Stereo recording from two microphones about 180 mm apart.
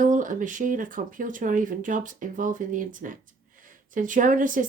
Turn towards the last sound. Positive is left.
turn(degrees=-45)  # may be behind; listen again after turning